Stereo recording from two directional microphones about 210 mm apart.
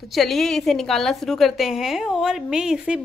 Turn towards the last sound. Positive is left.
turn(degrees=-5)  # may be behind; listen again after turning